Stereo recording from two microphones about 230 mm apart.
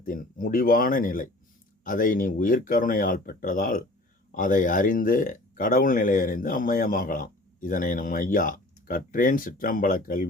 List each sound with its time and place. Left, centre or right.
0.0 s speech: left